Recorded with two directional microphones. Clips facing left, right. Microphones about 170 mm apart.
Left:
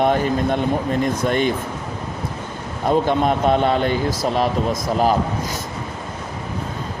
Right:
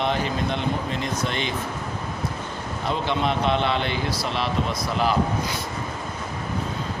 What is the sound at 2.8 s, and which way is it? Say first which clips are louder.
Speech: left 7 dB; 45° left (ahead or behind).